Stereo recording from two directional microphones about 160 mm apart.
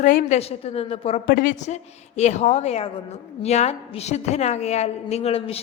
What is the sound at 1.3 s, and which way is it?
A woman's voice, 60° left (ahead or behind).